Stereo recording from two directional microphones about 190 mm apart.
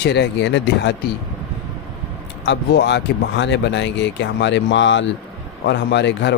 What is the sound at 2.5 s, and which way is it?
A man's voice, 65° left (ahead or behind).